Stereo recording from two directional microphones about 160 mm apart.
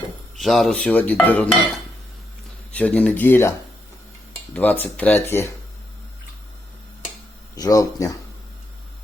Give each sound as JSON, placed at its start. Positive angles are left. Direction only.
{"t": 0.3, "sound": "dishes", "side_deg": 0}
{"t": 2.7, "sound": "dishes", "side_deg": 10}
{"t": 4.5, "sound": "dishes", "side_deg": 10}
{"t": 7.5, "sound": "speech", "side_deg": 20}